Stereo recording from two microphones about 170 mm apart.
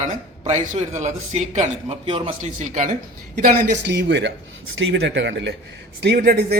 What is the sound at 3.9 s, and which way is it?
Speech, 90° right.